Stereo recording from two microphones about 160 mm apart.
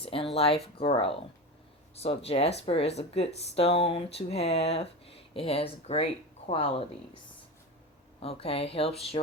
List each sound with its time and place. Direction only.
0.0 s speech: 35° left (ahead or behind)
8.2 s speech: 40° left (ahead or behind)